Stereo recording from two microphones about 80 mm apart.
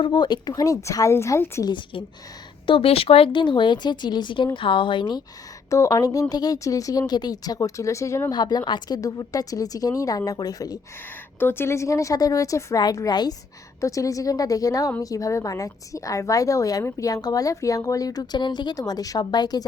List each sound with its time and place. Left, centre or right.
0.0 s speech: left
0.5 s a woman's voice: left
1.7 s a woman's voice: left
3.3 s speech: left
4.5 s a woman's voice: left
5.7 s speech: left
8.3 s speech: left
9.0 s speech: left
11.3 s a woman's voice: left
13.1 s speech: left
13.8 s speech: left